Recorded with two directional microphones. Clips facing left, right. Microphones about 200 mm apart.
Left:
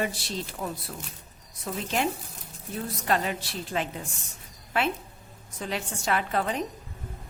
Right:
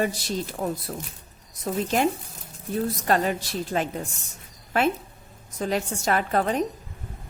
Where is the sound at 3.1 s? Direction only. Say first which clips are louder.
Right 3 dB; 45° right (ahead or behind).